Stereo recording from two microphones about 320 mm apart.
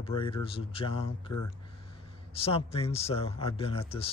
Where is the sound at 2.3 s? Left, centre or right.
Centre.